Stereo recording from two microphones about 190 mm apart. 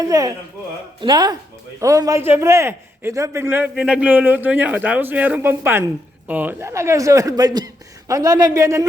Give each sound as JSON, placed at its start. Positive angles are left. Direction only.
{"t": 0.0, "sound": "speech", "side_deg": -20}